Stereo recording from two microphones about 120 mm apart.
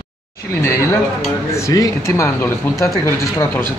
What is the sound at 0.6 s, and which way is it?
Speech, 25° left (ahead or behind).